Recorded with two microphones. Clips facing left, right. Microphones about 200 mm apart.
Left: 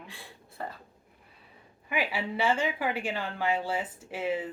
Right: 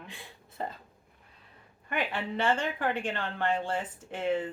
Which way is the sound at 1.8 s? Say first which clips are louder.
Left 1 dB; 5° left (ahead or behind).